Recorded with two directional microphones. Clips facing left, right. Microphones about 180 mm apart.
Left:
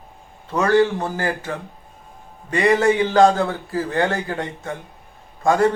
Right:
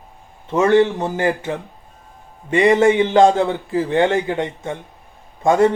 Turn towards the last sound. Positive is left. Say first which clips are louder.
# right 3 dB
turn(degrees=-25)  # may be behind; listen again after turning